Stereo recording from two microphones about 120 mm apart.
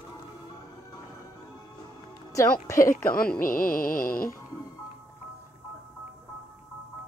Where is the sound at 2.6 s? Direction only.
25° left (ahead or behind).